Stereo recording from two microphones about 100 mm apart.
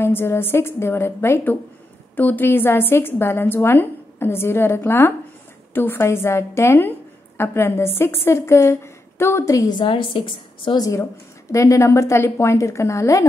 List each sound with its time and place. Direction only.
0.0 s a woman's voice: 25° left (ahead or behind)
9.7 s a woman's voice: 55° left (ahead or behind)
10.8 s a woman's voice: 30° left (ahead or behind)